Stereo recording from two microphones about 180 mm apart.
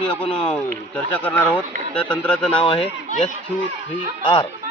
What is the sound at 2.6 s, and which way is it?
Speech, 30° left (ahead or behind).